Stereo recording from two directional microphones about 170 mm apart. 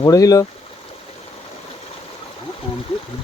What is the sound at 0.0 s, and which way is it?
Speech, 20° left (ahead or behind).